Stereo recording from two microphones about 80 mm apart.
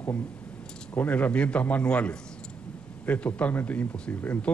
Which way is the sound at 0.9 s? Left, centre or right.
Centre.